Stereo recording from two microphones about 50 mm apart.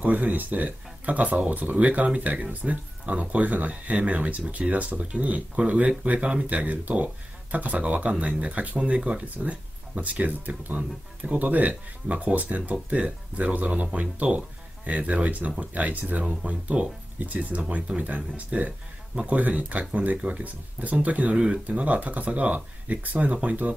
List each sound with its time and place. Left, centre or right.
0.0 s speech: right